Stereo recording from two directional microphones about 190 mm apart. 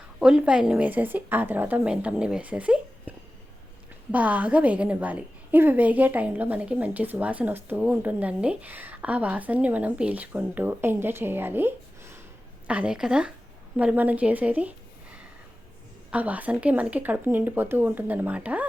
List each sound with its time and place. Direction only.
0.2 s a woman's voice: 5° right (ahead or behind)